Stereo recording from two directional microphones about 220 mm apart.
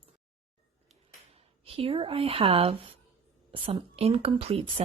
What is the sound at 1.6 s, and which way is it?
A woman's voice, 25° right (ahead or behind).